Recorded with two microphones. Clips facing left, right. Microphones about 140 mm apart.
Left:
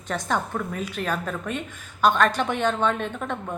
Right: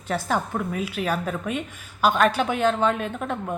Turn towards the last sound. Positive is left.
turn(degrees=-5)  # may be behind; listen again after turning